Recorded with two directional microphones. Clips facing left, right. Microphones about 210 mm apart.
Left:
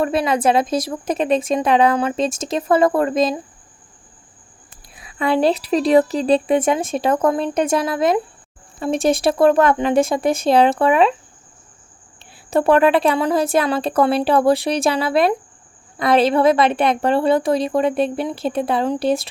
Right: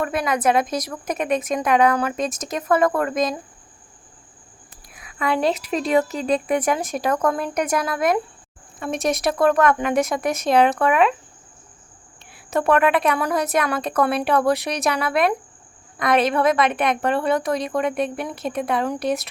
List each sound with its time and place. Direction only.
0.0 s a woman's voice: 30° left (ahead or behind)
4.9 s a woman's voice: 30° left (ahead or behind)
12.2 s a woman's voice: 30° left (ahead or behind)